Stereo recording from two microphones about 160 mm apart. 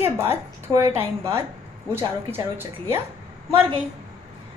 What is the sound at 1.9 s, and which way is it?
A woman's voice, 15° right (ahead or behind).